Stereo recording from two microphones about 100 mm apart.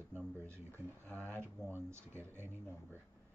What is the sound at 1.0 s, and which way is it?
Speech, 15° left (ahead or behind).